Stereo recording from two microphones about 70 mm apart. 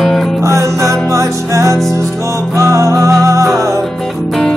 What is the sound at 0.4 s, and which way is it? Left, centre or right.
Music, right.